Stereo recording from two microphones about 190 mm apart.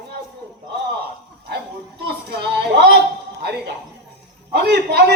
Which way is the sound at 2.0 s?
60° right (ahead or behind).